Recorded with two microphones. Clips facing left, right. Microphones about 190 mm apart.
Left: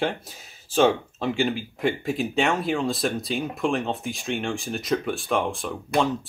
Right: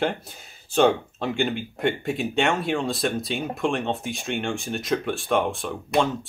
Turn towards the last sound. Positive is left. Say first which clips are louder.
# right 1 dB
turn(degrees=0)  # may be behind; listen again after turning